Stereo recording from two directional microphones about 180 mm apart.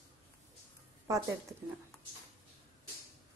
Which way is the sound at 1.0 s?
20° right (ahead or behind).